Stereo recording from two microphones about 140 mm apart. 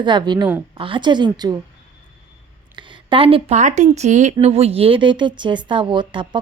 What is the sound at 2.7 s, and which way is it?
Speech, 35° right (ahead or behind).